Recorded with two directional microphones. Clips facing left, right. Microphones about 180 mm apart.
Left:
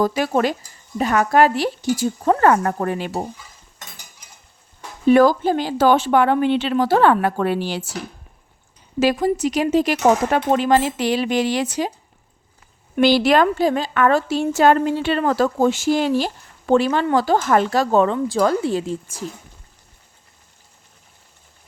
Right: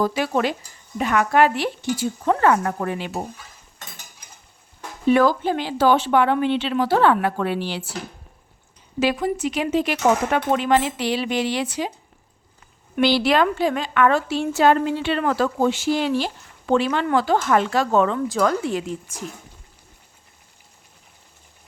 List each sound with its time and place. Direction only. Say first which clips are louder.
0.0 s a woman's voice: left 3 dB; 45° left (ahead or behind)
5.1 s a woman's voice: left 4 dB; 40° left (ahead or behind)
9.0 s a woman's voice: left 4 dB; 40° left (ahead or behind)
13.0 s a woman's voice: left 3 dB; 45° left (ahead or behind)